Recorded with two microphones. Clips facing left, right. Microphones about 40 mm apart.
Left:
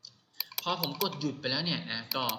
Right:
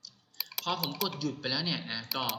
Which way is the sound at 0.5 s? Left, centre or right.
Centre.